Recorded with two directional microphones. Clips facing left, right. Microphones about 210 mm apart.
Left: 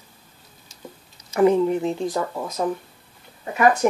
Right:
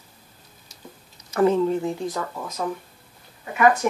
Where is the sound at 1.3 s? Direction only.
15° left (ahead or behind).